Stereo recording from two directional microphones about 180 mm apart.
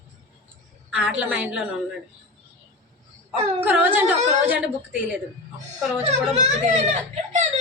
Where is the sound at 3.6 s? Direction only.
10° right (ahead or behind).